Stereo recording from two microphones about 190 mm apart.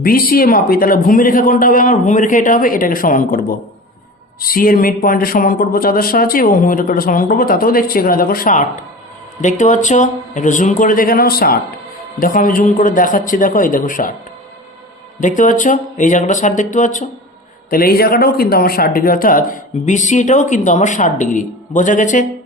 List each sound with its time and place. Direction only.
0.0 s speech: 50° left (ahead or behind)
15.2 s speech: 40° left (ahead or behind)
17.7 s speech: 50° left (ahead or behind)